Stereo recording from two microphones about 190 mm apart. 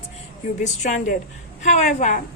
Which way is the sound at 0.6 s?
40° left (ahead or behind).